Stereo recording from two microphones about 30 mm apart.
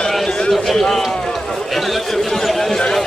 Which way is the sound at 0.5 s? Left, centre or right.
Centre.